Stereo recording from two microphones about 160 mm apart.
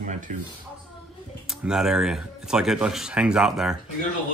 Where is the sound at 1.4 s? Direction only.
5° right (ahead or behind).